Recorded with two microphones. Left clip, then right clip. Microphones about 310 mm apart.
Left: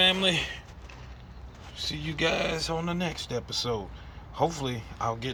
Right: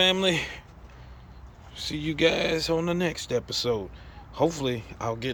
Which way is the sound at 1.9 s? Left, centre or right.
Centre.